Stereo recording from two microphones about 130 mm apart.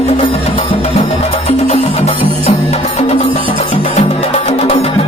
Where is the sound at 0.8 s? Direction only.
55° left (ahead or behind).